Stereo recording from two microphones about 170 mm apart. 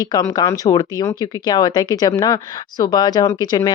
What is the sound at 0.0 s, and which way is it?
Speech, 20° left (ahead or behind).